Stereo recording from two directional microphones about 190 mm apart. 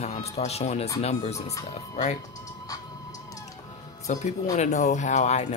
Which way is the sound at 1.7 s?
35° left (ahead or behind).